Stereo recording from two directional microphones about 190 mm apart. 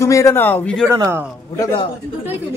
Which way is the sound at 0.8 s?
15° right (ahead or behind).